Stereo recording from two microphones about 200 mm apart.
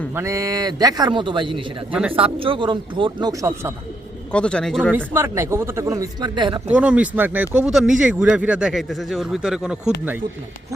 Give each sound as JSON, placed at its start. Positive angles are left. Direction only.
{"t": 0.1, "sound": "a man's voice", "side_deg": -15}
{"t": 4.3, "sound": "speech", "side_deg": 5}
{"t": 4.9, "sound": "speech", "side_deg": -10}
{"t": 6.7, "sound": "speech", "side_deg": -5}